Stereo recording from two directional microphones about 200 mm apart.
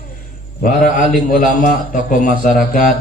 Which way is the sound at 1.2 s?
45° left (ahead or behind).